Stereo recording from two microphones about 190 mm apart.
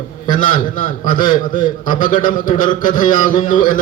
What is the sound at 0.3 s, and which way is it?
A man's voice, 45° left (ahead or behind).